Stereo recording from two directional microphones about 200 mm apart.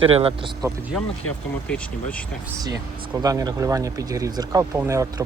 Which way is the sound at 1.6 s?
5° left (ahead or behind).